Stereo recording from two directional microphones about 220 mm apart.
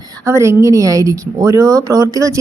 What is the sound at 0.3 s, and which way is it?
Speech, 10° right (ahead or behind).